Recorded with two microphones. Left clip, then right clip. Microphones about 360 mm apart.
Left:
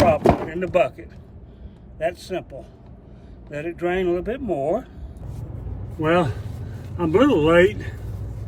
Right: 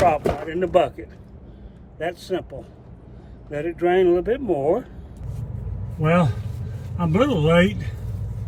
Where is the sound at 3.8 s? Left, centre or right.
Centre.